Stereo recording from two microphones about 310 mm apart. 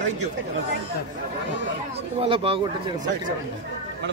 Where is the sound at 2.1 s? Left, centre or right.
Centre.